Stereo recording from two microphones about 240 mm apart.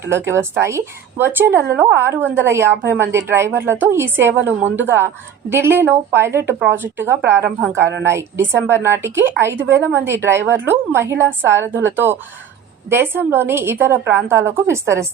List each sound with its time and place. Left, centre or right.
0.0 s a woman's voice: centre
9.6 s a woman's voice: right
9.8 s a woman's voice: centre
12.9 s a woman's voice: centre